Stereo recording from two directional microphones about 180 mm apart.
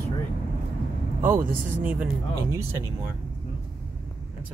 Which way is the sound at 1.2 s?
50° right (ahead or behind).